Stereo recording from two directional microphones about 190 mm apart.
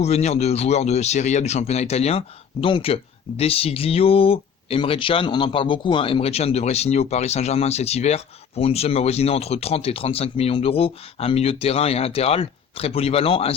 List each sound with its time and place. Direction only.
0.0 s speech: 35° left (ahead or behind)